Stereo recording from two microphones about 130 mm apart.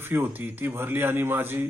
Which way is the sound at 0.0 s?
15° right (ahead or behind).